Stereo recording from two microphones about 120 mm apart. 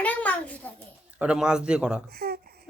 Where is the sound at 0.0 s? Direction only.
10° left (ahead or behind).